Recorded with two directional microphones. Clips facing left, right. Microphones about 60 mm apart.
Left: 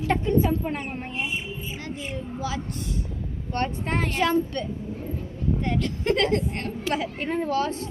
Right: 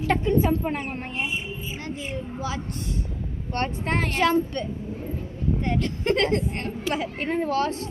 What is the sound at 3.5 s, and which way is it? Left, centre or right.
Speech, right.